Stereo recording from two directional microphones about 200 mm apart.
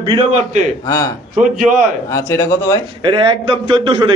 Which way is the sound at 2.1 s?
15° left (ahead or behind).